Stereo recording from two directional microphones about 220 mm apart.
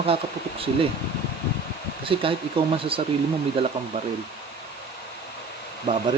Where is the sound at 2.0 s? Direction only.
25° right (ahead or behind).